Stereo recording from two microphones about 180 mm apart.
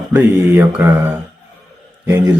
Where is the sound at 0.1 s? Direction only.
10° right (ahead or behind).